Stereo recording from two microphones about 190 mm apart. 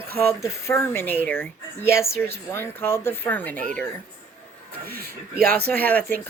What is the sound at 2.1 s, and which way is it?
Speech, 55° right (ahead or behind).